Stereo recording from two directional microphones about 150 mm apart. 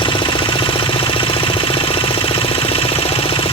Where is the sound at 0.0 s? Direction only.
35° left (ahead or behind).